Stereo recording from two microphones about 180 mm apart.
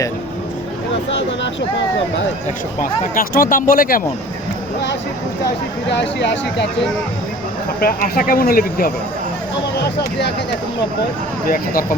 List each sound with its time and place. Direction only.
2.8 s speech: 50° left (ahead or behind)
5.9 s speech: 75° left (ahead or behind)
7.8 s speech: 55° left (ahead or behind)
9.8 s speech: 65° left (ahead or behind)
11.4 s speech: 50° left (ahead or behind)